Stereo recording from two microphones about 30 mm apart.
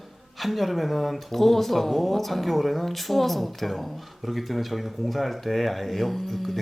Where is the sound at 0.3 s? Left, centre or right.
Centre.